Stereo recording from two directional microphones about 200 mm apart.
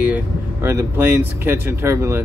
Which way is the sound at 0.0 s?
10° right (ahead or behind).